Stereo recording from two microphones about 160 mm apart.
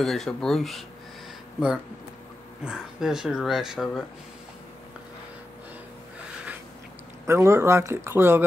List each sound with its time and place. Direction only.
0.0 s speech: centre (ahead or behind)
2.6 s speech: 5° right (ahead or behind)
7.2 s speech: 15° right (ahead or behind)